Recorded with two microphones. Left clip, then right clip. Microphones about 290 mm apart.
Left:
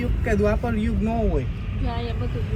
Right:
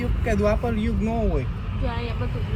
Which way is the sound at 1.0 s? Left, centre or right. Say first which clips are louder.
Left 1 dB; centre.